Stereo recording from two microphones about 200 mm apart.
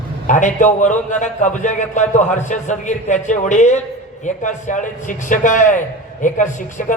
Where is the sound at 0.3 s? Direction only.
40° left (ahead or behind).